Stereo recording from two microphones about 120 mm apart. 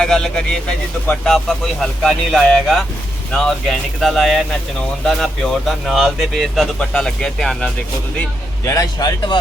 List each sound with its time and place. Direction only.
0.0 s a man's voice: 5° left (ahead or behind)
8.6 s a man's voice: 25° left (ahead or behind)